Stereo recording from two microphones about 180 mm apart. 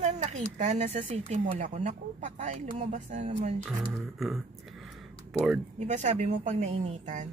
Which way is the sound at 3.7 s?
Centre (ahead or behind).